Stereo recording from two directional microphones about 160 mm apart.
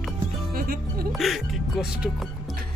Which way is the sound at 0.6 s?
65° right (ahead or behind).